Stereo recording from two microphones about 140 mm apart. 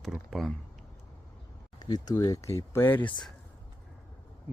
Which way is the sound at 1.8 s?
30° left (ahead or behind).